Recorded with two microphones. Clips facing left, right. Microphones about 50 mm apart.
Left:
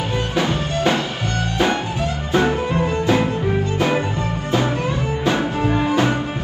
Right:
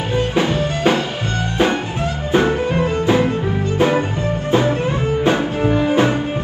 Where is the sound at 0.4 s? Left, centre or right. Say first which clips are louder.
Right 1 dB; right.